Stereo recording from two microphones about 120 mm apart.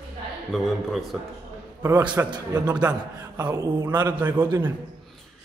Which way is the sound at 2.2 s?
20° right (ahead or behind).